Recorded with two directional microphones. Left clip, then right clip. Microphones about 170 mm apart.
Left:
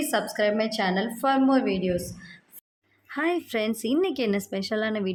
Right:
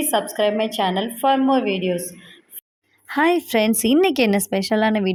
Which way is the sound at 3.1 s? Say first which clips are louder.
Right 9 dB; 45° right (ahead or behind).